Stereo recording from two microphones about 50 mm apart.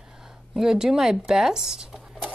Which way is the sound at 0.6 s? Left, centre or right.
Centre.